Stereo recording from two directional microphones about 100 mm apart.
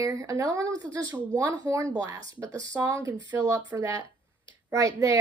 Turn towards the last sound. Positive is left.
turn(degrees=-35)  # may be behind; listen again after turning